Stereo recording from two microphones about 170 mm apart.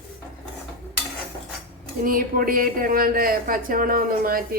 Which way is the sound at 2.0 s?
55° right (ahead or behind).